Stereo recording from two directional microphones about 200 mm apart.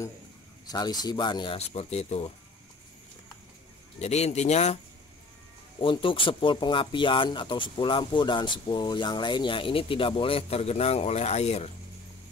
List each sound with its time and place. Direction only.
0.7 s speech: 20° left (ahead or behind)
4.0 s speech: 35° left (ahead or behind)
5.8 s speech: 25° left (ahead or behind)